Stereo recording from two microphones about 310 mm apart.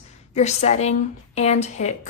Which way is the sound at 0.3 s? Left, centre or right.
Left.